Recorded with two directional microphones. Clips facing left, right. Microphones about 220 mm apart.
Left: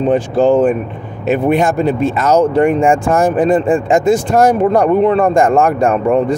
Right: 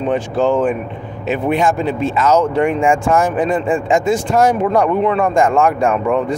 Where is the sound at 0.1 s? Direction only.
35° left (ahead or behind).